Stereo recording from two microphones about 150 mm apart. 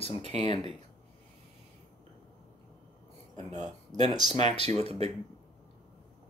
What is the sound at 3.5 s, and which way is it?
Speech, 50° right (ahead or behind).